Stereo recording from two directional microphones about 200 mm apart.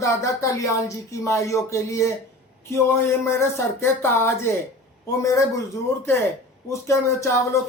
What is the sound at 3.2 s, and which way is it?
Speech, 10° left (ahead or behind).